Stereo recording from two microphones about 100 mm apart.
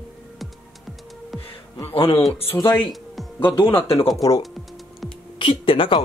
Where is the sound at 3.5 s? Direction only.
65° left (ahead or behind).